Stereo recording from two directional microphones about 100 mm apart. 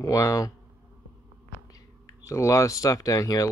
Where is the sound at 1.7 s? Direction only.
35° left (ahead or behind).